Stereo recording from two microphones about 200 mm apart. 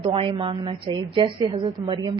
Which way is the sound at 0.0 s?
25° right (ahead or behind).